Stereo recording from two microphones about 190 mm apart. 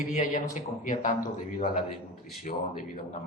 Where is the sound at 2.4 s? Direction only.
40° left (ahead or behind).